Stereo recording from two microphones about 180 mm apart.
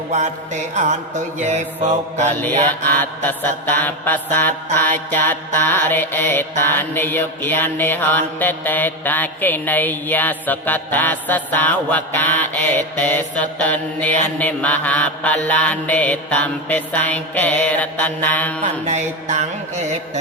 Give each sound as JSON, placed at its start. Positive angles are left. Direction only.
{"t": 0.1, "sound": "music", "side_deg": -40}
{"t": 2.4, "sound": "mantra", "side_deg": 10}
{"t": 18.6, "sound": "music", "side_deg": -40}